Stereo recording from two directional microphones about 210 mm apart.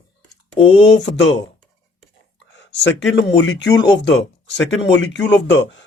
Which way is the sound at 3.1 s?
60° left (ahead or behind).